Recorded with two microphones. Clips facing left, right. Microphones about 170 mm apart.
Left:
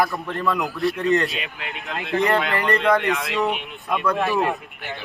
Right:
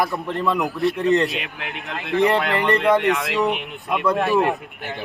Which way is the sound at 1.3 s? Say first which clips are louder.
Right 2 dB; 65° right (ahead or behind).